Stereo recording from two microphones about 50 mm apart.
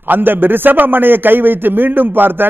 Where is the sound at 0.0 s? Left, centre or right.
Right.